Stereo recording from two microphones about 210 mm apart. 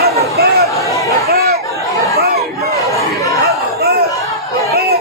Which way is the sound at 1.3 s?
50° right (ahead or behind).